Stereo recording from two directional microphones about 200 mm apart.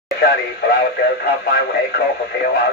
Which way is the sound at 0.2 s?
50° left (ahead or behind).